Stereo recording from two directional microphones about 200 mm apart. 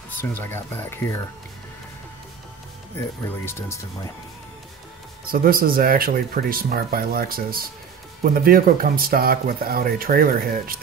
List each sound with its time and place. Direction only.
0.2 s speech: 10° left (ahead or behind)
3.0 s speech: 15° left (ahead or behind)
5.2 s speech: 45° right (ahead or behind)